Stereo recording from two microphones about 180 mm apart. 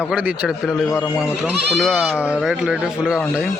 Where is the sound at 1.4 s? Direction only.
Centre (ahead or behind).